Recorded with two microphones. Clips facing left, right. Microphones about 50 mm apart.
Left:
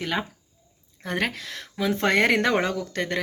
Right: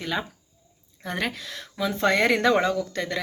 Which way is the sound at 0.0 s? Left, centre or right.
Left.